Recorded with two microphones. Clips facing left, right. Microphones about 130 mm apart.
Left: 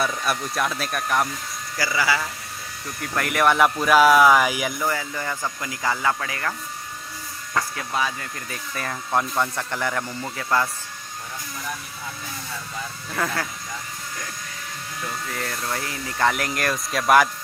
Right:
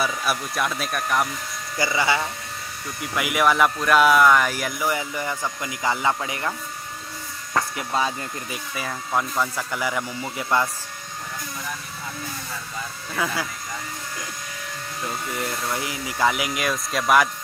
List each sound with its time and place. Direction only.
0.0 s speech: 5° right (ahead or behind)
1.8 s speech: 25° right (ahead or behind)
3.0 s speech: 5° right (ahead or behind)
4.8 s speech: 15° right (ahead or behind)
7.5 s speech: 25° right (ahead or behind)
8.5 s speech: 5° right (ahead or behind)
13.1 s speech: centre (ahead or behind)
15.0 s speech: 25° right (ahead or behind)
15.9 s speech: 5° right (ahead or behind)